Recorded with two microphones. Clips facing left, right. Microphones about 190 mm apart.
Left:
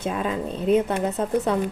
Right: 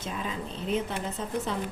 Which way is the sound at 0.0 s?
55° left (ahead or behind).